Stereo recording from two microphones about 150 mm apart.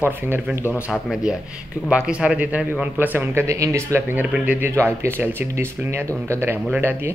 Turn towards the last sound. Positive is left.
turn(degrees=-15)  # may be behind; listen again after turning